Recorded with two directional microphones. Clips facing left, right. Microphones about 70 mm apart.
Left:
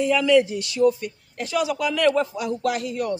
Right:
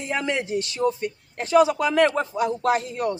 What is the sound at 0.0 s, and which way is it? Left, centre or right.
A man's voice, right.